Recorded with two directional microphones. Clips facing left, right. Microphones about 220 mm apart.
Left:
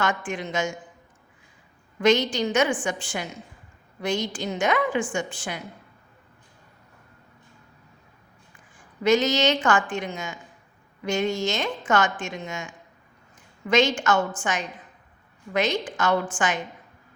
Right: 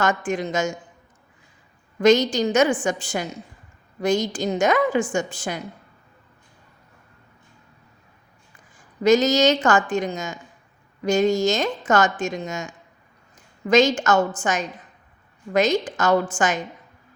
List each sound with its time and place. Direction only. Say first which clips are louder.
0.0 s speech: right 5 dB; 40° right (ahead or behind)
2.0 s speech: right 4 dB; 40° right (ahead or behind)
9.0 s speech: right 4 dB; 40° right (ahead or behind)